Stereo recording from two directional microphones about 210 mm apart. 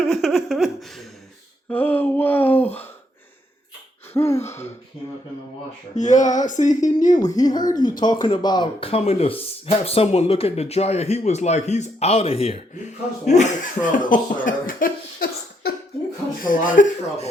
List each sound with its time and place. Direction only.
0.0 s laughter: centre (ahead or behind)
1.7 s a sound: 10° left (ahead or behind)
4.1 s throat clearing: 15° left (ahead or behind)
6.0 s speech: 35° left (ahead or behind)
7.2 s speech: 15° left (ahead or behind); by 17.2 s 35° left (ahead or behind)